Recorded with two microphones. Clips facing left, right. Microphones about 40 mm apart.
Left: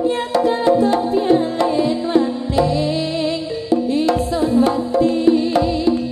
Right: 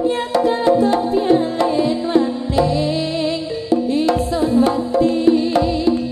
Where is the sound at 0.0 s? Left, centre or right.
Centre.